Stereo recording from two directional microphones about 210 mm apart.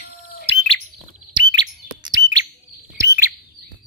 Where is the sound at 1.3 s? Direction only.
20° right (ahead or behind).